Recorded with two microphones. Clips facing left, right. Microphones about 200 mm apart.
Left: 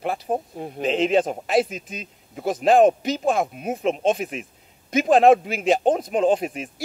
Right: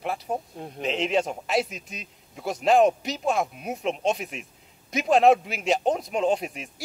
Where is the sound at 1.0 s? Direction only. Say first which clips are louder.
Left 5 dB; 50° left (ahead or behind).